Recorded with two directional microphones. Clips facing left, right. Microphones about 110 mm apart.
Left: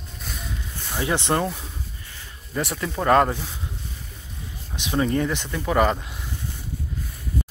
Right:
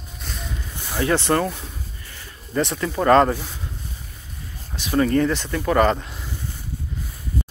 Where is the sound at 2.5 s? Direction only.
5° left (ahead or behind).